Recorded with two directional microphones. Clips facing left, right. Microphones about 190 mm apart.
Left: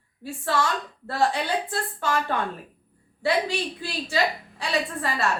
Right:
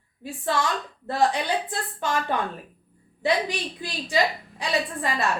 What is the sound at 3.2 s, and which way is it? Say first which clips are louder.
A woman's voice: even; 15° right (ahead or behind).